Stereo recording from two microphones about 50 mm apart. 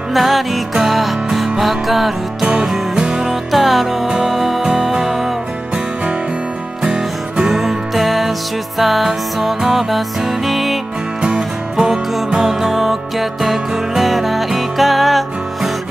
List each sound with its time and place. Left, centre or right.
0.1 s music: centre
2.4 s music: centre
3.5 s music: centre
6.8 s music: centre
11.2 s music: centre